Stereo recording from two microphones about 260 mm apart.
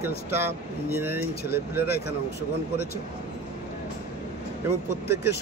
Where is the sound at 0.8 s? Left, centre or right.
Centre.